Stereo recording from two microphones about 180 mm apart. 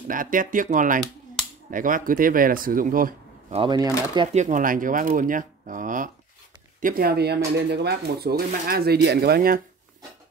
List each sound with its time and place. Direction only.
0.1 s speech: 50° right (ahead or behind)
3.4 s speech: 30° right (ahead or behind)
4.3 s speech: 45° right (ahead or behind); by 9.6 s 60° right (ahead or behind)